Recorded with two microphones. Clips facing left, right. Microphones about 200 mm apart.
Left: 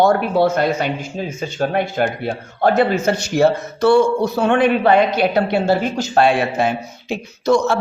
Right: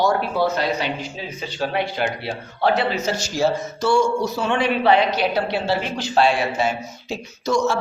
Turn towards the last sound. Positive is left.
turn(degrees=60)  # may be behind; listen again after turning